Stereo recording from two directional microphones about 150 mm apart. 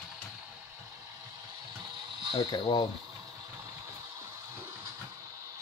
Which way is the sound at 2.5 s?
30° left (ahead or behind).